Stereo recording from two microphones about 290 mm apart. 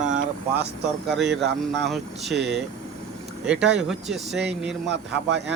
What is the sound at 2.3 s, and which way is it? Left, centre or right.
Speech, right.